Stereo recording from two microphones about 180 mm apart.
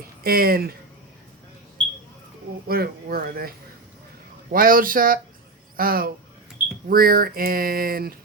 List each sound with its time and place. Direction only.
0.2 s speech: 55° right (ahead or behind)
2.6 s speech: 55° right (ahead or behind)
4.5 s speech: 50° right (ahead or behind)